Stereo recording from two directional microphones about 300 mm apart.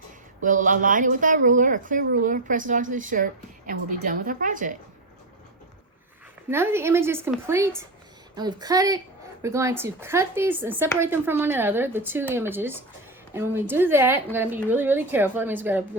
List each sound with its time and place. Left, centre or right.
0.4 s speech: right
6.5 s speech: centre